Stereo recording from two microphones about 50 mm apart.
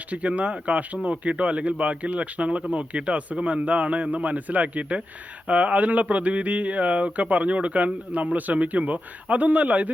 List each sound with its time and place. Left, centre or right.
0.1 s a man's voice: right